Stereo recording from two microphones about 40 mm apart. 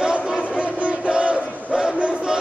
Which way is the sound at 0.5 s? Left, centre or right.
Right.